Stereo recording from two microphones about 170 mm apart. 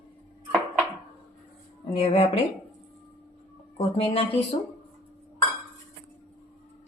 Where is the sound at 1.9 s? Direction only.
35° left (ahead or behind).